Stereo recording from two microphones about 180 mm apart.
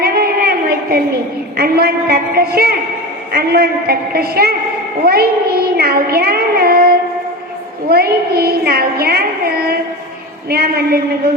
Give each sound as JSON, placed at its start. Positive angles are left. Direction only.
{"t": 0.0, "sound": "a sound", "side_deg": -60}
{"t": 1.5, "sound": "a woman's voice", "side_deg": -55}
{"t": 7.9, "sound": "a woman's voice", "side_deg": -60}